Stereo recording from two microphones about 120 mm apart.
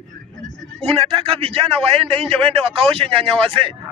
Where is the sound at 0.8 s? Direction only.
55° right (ahead or behind).